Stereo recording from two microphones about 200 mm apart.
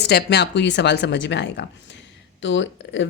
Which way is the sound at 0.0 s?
55° left (ahead or behind).